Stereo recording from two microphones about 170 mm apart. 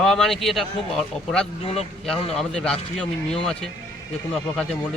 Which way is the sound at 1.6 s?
35° left (ahead or behind).